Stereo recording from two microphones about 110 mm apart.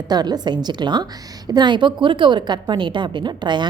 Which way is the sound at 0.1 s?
40° right (ahead or behind).